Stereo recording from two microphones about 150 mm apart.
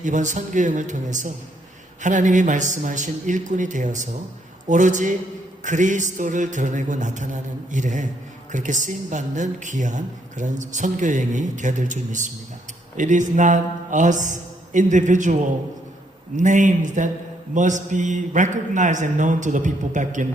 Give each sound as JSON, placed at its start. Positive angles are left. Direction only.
{"t": 0.0, "sound": "a woman's voice", "side_deg": -55}